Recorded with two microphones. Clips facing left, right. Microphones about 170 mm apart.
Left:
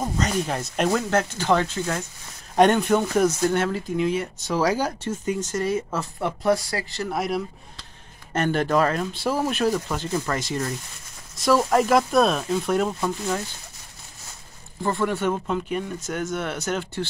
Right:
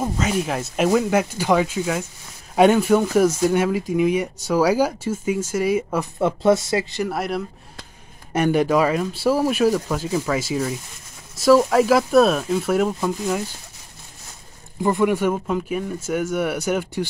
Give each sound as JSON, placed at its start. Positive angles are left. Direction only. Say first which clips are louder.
{"t": 0.0, "sound": "speech", "louder": "right 2 dB", "side_deg": -5}
{"t": 6.1, "sound": "speech", "louder": "right 5 dB", "side_deg": -25}
{"t": 7.1, "sound": "speech", "louder": "right 1 dB", "side_deg": 0}
{"t": 8.3, "sound": "speech", "louder": "right 4 dB", "side_deg": -10}
{"t": 14.8, "sound": "speech", "louder": "right 5 dB", "side_deg": -15}